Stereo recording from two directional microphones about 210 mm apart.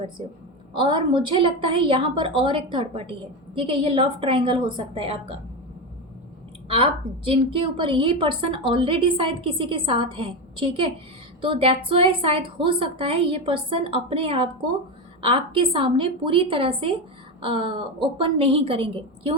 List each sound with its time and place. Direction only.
0.7 s a woman's voice: 20° right (ahead or behind)
6.7 s a woman's voice: 25° right (ahead or behind)